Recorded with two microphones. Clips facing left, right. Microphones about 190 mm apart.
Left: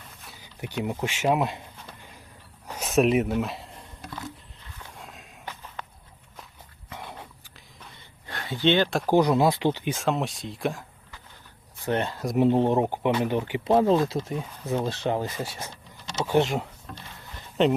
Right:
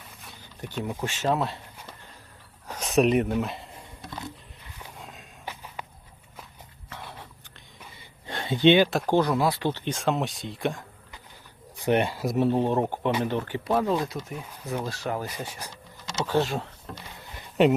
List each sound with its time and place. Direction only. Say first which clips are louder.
0.9 s speech: left 2 dB; 15° left (ahead or behind)
2.6 s a sound: even; 5° left (ahead or behind)
4.9 s walk: even; centre (ahead or behind)
5.5 s walk: right 1 dB; 10° right (ahead or behind)
8.3 s a sound: right 4 dB; 25° right (ahead or behind)
8.9 s speech: even; centre (ahead or behind)
9.1 s speech: left 3 dB; 20° left (ahead or behind)
9.9 s speech: even; centre (ahead or behind)
11.8 s speech: right 3 dB; 15° right (ahead or behind)
12.4 s speech: left 3 dB; 15° left (ahead or behind)
13.7 s speech: left 5 dB; 25° left (ahead or behind)
17.3 s a sound: right 2 dB; 10° right (ahead or behind)